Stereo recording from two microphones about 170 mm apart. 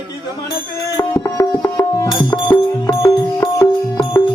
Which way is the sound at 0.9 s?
20° left (ahead or behind).